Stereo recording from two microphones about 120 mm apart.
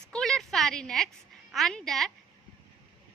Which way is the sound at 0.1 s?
5° left (ahead or behind).